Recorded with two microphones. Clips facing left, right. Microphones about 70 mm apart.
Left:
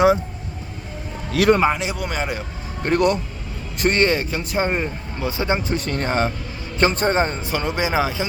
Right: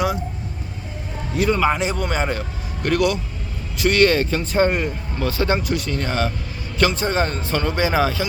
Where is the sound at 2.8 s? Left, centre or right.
Left.